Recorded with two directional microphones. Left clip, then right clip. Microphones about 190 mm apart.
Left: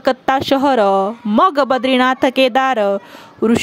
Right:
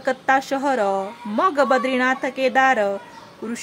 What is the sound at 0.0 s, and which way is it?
Speech, 40° left (ahead or behind).